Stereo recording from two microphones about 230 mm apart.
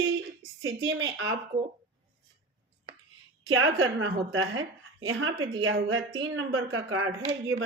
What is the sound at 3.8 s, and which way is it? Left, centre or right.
A woman's voice, right.